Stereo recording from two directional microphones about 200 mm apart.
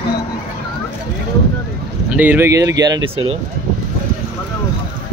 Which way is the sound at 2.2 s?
10° right (ahead or behind).